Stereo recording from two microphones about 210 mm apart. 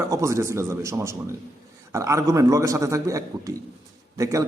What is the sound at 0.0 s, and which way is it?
A man's voice, 15° right (ahead or behind).